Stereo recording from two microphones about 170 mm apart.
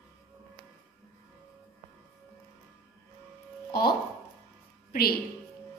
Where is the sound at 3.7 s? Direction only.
65° left (ahead or behind).